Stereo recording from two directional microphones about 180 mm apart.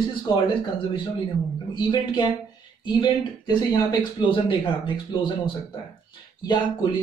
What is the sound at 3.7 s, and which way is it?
Speech, 25° left (ahead or behind).